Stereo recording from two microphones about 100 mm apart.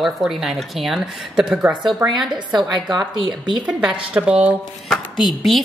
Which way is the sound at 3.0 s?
50° right (ahead or behind).